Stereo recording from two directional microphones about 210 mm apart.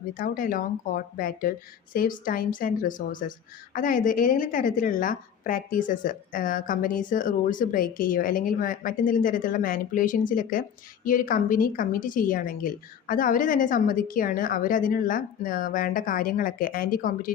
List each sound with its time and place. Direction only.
0.1 s speech: 40° left (ahead or behind)